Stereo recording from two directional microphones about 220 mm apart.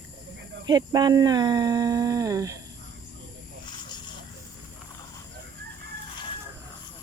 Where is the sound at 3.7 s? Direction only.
20° left (ahead or behind).